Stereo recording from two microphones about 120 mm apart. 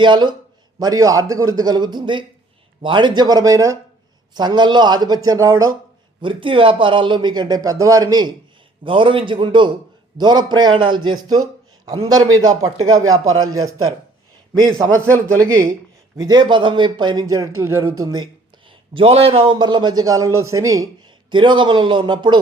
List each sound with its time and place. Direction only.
0.0 s a man's voice: 40° right (ahead or behind)
6.2 s a man's voice: 45° right (ahead or behind)
8.8 s a man's voice: 45° right (ahead or behind)
14.8 s a man's voice: 20° right (ahead or behind)
18.9 s a man's voice: 55° right (ahead or behind)
19.5 s a man's voice: 35° right (ahead or behind)